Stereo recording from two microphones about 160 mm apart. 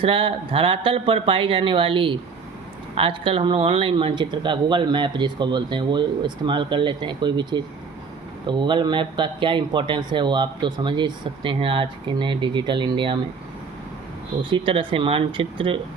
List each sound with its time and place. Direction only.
0.0 s speech: 35° right (ahead or behind)
14.5 s speech: 35° right (ahead or behind)